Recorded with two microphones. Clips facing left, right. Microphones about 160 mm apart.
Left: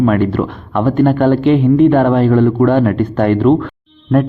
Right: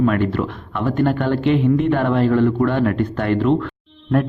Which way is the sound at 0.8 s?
55° left (ahead or behind).